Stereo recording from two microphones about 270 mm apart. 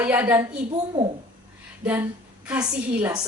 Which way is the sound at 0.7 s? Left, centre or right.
Centre.